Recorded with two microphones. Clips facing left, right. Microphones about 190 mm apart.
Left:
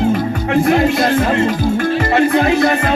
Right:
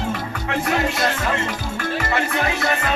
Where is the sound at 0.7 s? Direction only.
35° left (ahead or behind).